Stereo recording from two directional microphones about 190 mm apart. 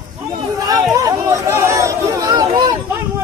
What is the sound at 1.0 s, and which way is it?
Chatter, 15° right (ahead or behind).